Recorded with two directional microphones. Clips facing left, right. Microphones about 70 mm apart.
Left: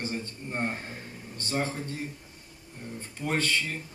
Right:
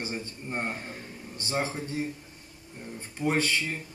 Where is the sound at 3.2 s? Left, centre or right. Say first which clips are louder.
Right 2 dB; centre.